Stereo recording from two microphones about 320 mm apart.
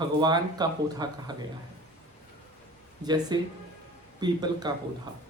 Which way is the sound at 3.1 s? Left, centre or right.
Centre.